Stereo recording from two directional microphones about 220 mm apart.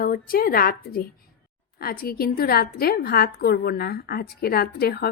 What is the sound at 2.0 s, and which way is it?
A woman's voice, 45° left (ahead or behind).